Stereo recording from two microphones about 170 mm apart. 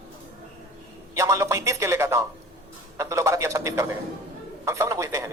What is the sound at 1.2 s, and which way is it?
Speech, 15° right (ahead or behind).